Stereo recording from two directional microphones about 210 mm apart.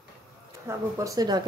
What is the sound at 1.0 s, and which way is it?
Speech, 15° right (ahead or behind).